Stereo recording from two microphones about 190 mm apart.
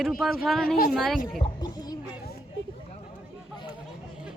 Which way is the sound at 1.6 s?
20° left (ahead or behind).